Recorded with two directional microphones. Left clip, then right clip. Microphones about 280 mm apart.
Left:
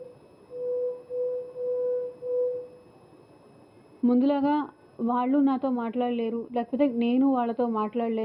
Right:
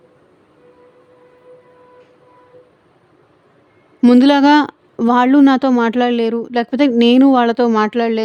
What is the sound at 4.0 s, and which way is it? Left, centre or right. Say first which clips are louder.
A woman's voice: right 14 dB; right.